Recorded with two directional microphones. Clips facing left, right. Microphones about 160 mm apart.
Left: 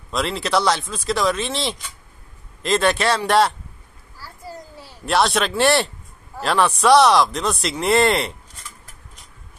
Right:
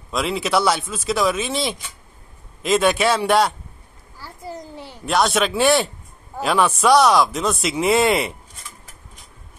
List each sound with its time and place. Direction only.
0.1 s speech: centre (ahead or behind)
4.2 s a sound: 20° right (ahead or behind)
5.0 s speech: centre (ahead or behind)